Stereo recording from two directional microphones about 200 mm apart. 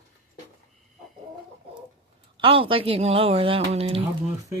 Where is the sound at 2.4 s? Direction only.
25° right (ahead or behind).